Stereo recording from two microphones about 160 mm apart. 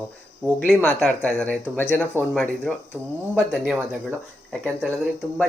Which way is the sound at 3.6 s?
5° right (ahead or behind).